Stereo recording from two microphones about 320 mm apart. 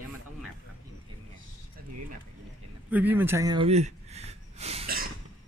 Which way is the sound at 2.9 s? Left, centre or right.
Centre.